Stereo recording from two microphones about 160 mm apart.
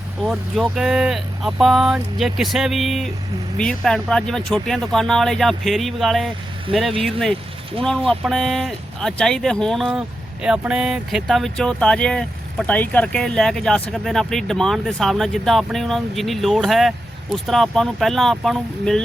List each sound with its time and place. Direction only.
0.3 s speech: 5° right (ahead or behind)
6.7 s speech: 35° right (ahead or behind)
7.0 s speech: 5° left (ahead or behind)